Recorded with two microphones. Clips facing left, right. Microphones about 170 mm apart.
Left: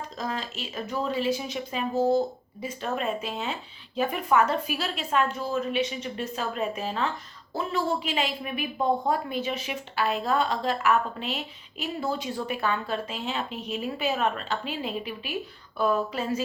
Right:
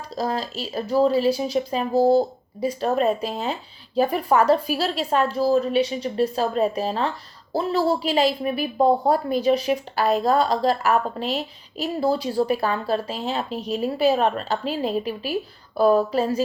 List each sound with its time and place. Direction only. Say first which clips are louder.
0.2 s a woman's voice: right 8 dB; 35° right (ahead or behind)